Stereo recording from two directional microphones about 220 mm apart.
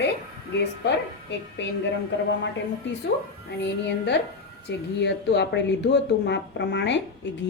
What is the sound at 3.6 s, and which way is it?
Speech, 55° left (ahead or behind).